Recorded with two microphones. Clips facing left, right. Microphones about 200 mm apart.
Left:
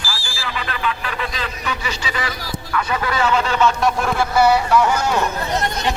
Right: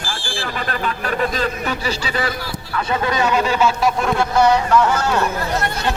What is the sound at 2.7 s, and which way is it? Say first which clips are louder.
Speech: right 1 dB; 25° right (ahead or behind).